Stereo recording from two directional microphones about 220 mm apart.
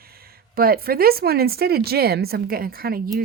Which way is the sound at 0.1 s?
45° right (ahead or behind).